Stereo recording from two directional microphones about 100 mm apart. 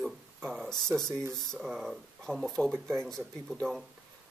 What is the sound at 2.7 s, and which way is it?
Speech, 25° right (ahead or behind).